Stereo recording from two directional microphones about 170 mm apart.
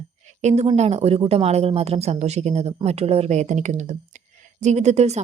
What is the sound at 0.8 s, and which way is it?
Speech, 35° right (ahead or behind).